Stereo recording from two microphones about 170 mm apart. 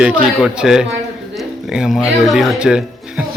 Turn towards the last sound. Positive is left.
turn(degrees=-5)  # may be behind; listen again after turning